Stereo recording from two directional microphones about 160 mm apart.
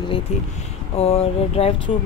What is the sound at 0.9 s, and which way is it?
Speech, 35° left (ahead or behind).